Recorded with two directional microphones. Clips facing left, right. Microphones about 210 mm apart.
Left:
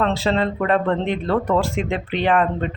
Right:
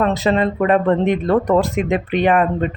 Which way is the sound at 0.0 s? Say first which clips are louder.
Right 3 dB; 15° right (ahead or behind).